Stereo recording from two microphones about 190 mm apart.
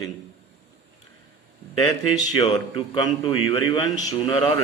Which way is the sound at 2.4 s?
25° left (ahead or behind).